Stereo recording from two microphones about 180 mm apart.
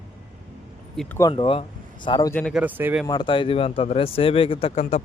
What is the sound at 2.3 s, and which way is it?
Speech, 5° left (ahead or behind).